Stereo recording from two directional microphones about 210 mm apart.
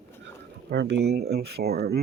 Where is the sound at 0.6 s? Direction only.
55° right (ahead or behind).